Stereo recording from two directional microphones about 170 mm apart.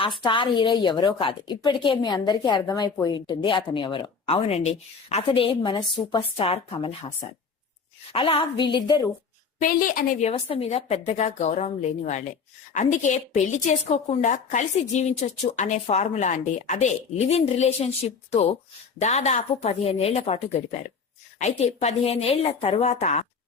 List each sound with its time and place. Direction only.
0.3 s a woman's voice: 30° left (ahead or behind)
8.1 s a woman's voice: 30° left (ahead or behind)
9.6 s a woman's voice: 55° left (ahead or behind)